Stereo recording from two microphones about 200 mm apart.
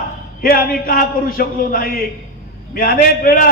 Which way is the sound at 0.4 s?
45° left (ahead or behind).